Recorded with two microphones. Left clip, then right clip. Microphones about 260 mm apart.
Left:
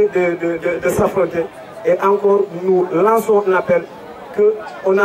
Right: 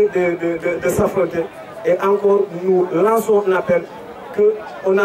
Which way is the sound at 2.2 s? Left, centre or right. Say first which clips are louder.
Left 1 dB; right.